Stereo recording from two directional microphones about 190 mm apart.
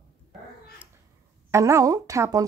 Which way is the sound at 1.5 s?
15° right (ahead or behind).